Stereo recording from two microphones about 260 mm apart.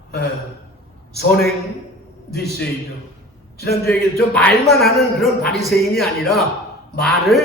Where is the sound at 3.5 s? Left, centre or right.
Left.